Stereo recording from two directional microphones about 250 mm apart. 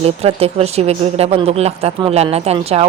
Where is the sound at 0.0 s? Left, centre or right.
Right.